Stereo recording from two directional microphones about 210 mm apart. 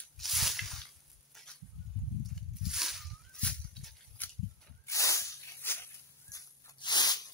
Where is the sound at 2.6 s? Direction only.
Centre (ahead or behind).